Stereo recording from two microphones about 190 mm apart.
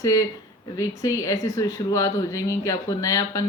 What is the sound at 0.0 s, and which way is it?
Speech, 15° left (ahead or behind).